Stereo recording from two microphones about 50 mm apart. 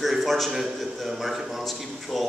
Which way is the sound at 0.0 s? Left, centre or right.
Centre.